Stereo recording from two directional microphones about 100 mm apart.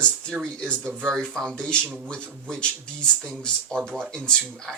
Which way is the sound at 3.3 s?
5° left (ahead or behind).